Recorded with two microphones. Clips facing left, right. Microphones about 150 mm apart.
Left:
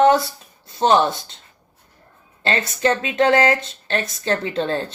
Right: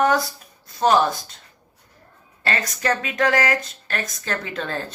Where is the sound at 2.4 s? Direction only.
25° left (ahead or behind).